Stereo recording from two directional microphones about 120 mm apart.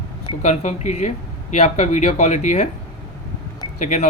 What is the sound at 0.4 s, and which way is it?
Speech, 80° left.